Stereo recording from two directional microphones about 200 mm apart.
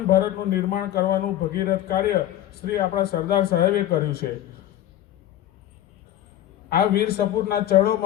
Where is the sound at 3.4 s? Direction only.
50° left (ahead or behind).